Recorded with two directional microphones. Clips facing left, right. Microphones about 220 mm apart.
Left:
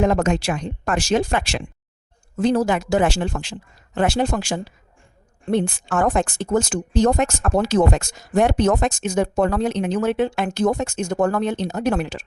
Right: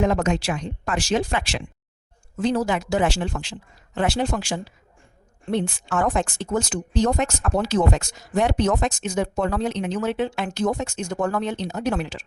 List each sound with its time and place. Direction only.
0.0 s speech: 50° left (ahead or behind)